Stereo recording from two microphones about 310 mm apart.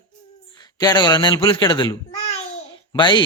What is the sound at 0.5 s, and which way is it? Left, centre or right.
A child's voice, centre.